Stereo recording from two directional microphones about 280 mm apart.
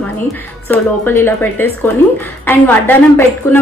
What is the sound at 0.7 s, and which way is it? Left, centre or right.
A woman's voice, centre.